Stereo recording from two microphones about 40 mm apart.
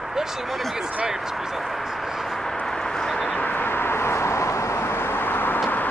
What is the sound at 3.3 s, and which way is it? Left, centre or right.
Vehicle, left.